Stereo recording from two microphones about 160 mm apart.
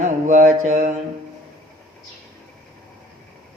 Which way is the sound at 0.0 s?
50° right (ahead or behind).